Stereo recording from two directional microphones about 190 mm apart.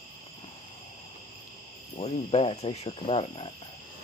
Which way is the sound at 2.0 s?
30° left (ahead or behind).